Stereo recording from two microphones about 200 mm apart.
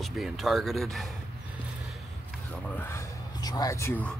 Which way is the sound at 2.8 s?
15° left (ahead or behind).